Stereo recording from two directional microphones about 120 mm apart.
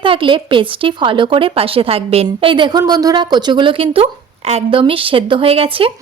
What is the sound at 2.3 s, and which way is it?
A woman's voice, 45° right (ahead or behind).